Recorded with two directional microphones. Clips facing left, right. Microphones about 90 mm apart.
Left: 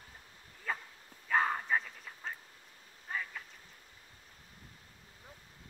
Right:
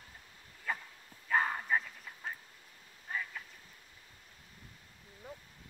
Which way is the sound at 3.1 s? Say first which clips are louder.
Even; centre (ahead or behind).